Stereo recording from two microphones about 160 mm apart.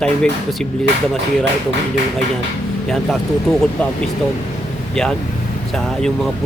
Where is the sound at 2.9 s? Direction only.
Centre (ahead or behind).